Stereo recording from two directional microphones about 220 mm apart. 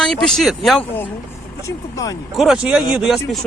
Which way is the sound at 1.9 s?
15° left (ahead or behind).